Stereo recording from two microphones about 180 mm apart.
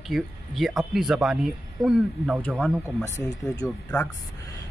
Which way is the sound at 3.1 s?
15° left (ahead or behind).